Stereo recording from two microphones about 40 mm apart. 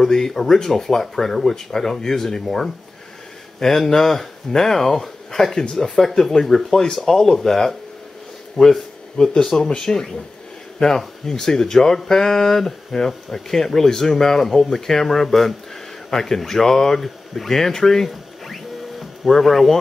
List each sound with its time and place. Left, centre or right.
0.0 s a man's voice: centre